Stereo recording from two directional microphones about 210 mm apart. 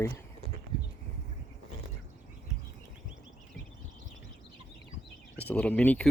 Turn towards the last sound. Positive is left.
turn(degrees=5)  # may be behind; listen again after turning